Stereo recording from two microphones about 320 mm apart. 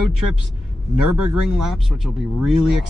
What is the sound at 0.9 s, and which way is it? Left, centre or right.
Speech, right.